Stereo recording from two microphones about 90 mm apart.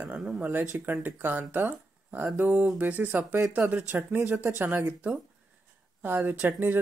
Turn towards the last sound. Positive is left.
turn(degrees=-20)  # may be behind; listen again after turning